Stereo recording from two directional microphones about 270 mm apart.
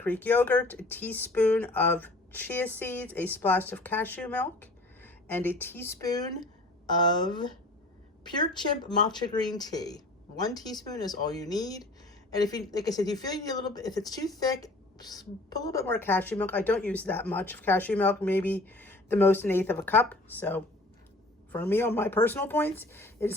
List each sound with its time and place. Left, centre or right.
0.0 s speech: centre
14.4 s a sound: centre
15.4 s speech: centre